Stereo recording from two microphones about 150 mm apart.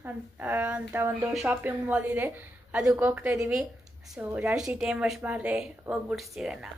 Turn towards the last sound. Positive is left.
turn(degrees=-5)  # may be behind; listen again after turning